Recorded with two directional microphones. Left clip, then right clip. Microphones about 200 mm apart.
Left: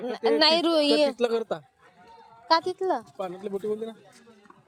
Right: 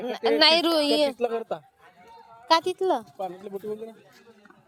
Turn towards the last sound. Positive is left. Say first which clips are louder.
# left 4 dB
turn(degrees=50)  # may be behind; listen again after turning